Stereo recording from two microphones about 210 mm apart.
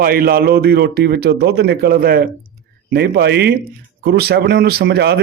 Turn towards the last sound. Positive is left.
turn(degrees=-50)  # may be behind; listen again after turning